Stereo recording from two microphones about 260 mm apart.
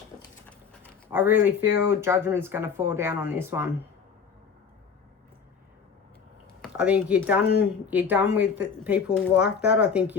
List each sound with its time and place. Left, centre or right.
0.8 s speech: centre
6.6 s speech: centre
7.4 s speech: left
7.9 s speech: centre